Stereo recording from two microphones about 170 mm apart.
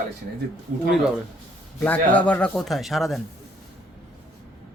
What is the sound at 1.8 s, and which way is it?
Speech, 10° left (ahead or behind).